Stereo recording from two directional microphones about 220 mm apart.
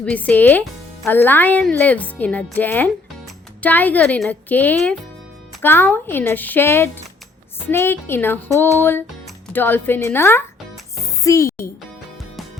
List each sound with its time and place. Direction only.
0.0 s a child's voice: 5° left (ahead or behind)